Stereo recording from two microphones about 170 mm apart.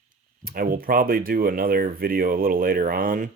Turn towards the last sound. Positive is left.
turn(degrees=-55)  # may be behind; listen again after turning